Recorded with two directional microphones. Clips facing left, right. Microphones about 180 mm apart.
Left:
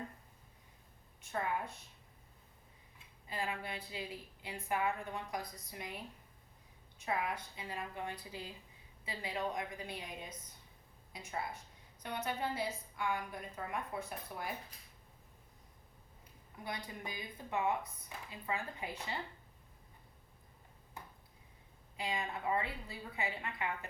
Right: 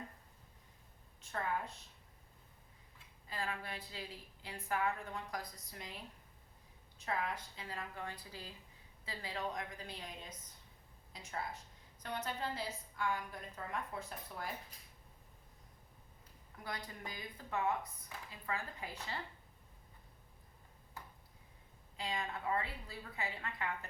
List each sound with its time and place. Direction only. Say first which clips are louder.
1.3 s a woman's voice: left 2 dB; 15° left (ahead or behind)
3.2 s a woman's voice: left 2 dB; 20° left (ahead or behind)
7.0 s a woman's voice: left 2 dB; 15° left (ahead or behind)
12.0 s a woman's voice: left 2 dB; 20° left (ahead or behind)
16.6 s speech: left 2 dB; 20° left (ahead or behind)
21.9 s a woman's voice: left 2 dB; 15° left (ahead or behind)